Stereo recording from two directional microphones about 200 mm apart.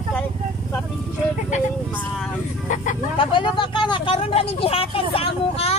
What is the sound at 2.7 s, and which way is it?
Speech, 40° left (ahead or behind).